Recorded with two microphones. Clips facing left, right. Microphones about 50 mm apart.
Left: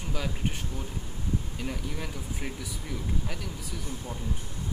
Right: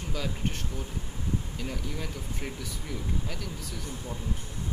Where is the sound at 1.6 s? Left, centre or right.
Centre.